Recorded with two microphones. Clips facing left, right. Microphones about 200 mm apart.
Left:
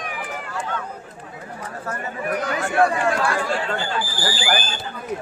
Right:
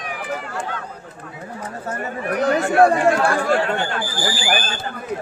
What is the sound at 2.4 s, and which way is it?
Speech, 50° right (ahead or behind).